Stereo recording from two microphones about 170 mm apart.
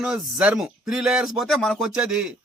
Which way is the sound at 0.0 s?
5° right (ahead or behind).